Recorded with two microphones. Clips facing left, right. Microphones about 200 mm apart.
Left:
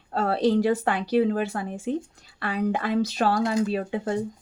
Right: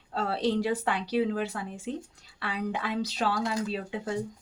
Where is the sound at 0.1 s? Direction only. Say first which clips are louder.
Left 6 dB; 50° left (ahead or behind).